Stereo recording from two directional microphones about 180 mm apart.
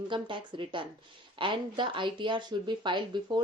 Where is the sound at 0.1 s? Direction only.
25° right (ahead or behind).